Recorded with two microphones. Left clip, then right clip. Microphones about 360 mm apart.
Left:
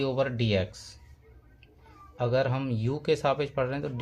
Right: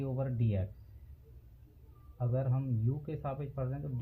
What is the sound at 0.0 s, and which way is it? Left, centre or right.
Speech, left.